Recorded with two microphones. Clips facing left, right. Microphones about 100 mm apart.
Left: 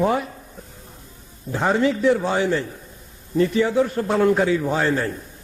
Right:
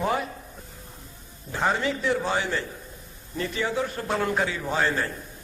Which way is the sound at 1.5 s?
15° left (ahead or behind).